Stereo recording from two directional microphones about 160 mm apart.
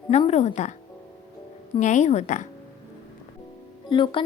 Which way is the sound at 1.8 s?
50° left (ahead or behind).